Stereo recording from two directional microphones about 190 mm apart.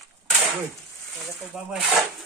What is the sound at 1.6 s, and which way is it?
Speech, 5° right (ahead or behind).